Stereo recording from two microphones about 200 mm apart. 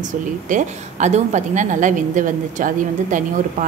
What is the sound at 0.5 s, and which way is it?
A woman's voice, 40° right (ahead or behind).